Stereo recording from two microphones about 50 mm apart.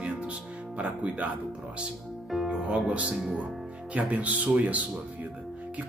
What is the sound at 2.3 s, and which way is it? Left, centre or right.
Speech, centre.